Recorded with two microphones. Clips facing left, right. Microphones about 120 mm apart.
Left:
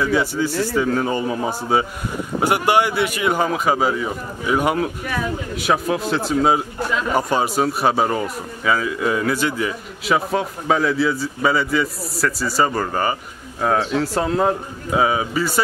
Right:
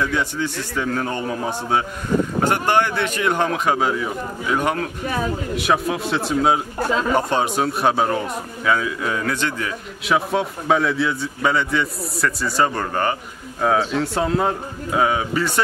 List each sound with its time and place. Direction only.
0.0 s a man's voice: 5° left (ahead or behind)
5.0 s speech: 30° right (ahead or behind)
5.5 s a man's voice: centre (ahead or behind)